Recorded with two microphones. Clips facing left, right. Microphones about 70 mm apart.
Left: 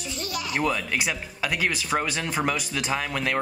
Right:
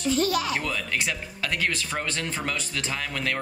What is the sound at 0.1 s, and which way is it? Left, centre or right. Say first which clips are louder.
Speech: right 9 dB; right.